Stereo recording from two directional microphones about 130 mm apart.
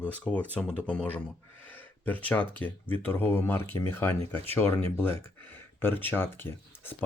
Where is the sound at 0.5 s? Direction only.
10° left (ahead or behind).